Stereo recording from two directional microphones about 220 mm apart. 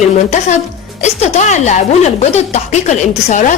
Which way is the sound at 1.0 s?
30° left (ahead or behind).